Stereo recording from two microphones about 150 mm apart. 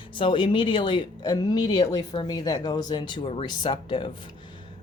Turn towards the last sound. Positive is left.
turn(degrees=35)  # may be behind; listen again after turning